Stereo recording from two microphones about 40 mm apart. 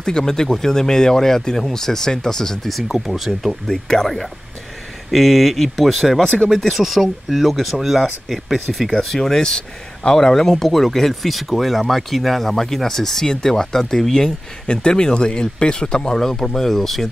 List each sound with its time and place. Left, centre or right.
0.0 s speech: centre
2.7 s speech: centre
3.6 s speech: centre
16.2 s speech: centre